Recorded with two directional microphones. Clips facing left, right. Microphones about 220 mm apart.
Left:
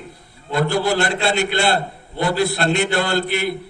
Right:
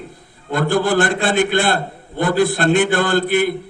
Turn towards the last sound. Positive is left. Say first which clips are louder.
# right 4 dB
turn(degrees=-50)  # may be behind; listen again after turning